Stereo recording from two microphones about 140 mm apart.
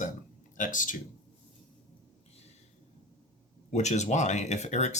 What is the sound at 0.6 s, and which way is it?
Speech, 70° left (ahead or behind).